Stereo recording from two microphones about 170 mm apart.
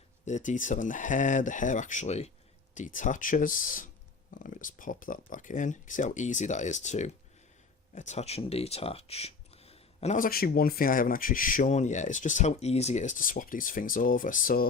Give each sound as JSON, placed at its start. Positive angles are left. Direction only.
{"t": 0.3, "sound": "speech", "side_deg": 45}
{"t": 10.2, "sound": "speech", "side_deg": 60}